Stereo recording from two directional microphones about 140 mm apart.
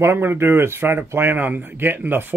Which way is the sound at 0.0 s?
15° right (ahead or behind).